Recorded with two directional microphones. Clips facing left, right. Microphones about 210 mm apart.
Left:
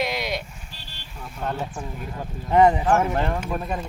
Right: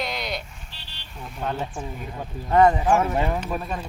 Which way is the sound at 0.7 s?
45° left (ahead or behind).